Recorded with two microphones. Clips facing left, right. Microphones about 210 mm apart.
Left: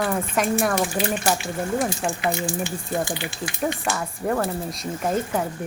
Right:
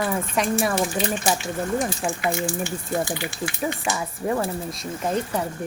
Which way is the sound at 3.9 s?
10° right (ahead or behind).